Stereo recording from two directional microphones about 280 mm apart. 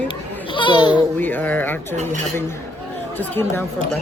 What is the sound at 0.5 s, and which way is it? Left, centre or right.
Speech, centre.